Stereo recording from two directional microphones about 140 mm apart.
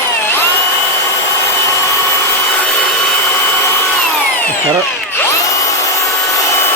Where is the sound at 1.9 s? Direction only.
20° left (ahead or behind).